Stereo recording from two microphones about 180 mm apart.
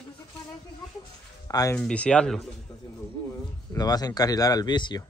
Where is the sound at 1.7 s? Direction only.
5° left (ahead or behind).